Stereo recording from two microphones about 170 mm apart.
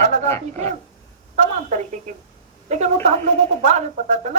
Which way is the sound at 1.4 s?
45° right (ahead or behind).